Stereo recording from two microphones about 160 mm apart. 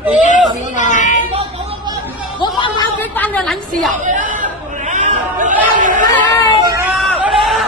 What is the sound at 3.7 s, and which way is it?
Speech, 55° right (ahead or behind).